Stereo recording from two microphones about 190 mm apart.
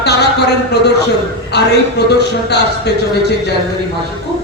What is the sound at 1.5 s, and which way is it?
Speech, 60° left (ahead or behind).